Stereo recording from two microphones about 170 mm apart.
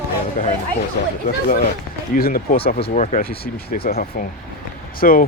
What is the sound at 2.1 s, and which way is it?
Speech, 55° left (ahead or behind).